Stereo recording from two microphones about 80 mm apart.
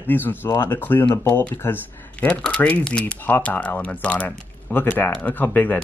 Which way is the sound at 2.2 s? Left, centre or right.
Centre.